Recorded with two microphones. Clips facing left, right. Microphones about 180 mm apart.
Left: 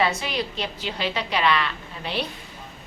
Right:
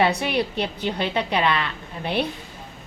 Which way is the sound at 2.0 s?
55° right (ahead or behind).